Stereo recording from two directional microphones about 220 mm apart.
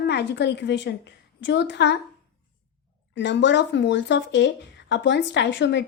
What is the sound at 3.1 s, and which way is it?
A woman's voice, 55° left (ahead or behind).